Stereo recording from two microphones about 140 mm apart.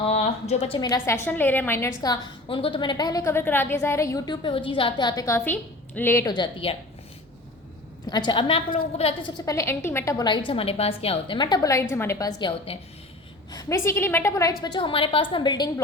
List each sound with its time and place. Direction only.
0.0 s a sound: 50° left (ahead or behind)
0.8 s a woman's voice: 25° left (ahead or behind)
4.4 s a woman's voice: 35° left (ahead or behind); by 6.3 s 20° left (ahead or behind)
6.3 s a woman's voice: 35° left (ahead or behind)
8.1 s a woman's voice: 35° left (ahead or behind)
9.5 s a woman's voice: 20° left (ahead or behind)
12.4 s a woman's voice: 40° left (ahead or behind)
13.5 s a woman's voice: 25° left (ahead or behind)
14.6 s a woman's voice: 35° left (ahead or behind)